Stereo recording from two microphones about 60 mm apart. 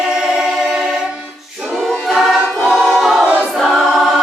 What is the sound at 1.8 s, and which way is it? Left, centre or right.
Choir, centre.